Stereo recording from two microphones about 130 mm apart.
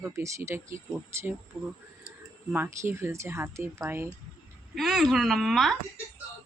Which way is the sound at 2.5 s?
15° right (ahead or behind).